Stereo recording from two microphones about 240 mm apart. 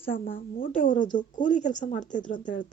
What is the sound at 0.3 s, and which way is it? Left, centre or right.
Speech, left.